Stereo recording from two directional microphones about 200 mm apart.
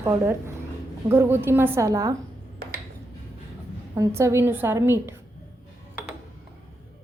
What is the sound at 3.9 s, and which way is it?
Speech, 15° right (ahead or behind).